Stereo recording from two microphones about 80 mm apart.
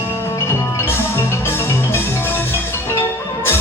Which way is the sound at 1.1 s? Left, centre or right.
Left.